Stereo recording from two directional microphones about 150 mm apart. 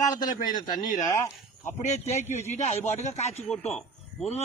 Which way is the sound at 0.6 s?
25° left (ahead or behind).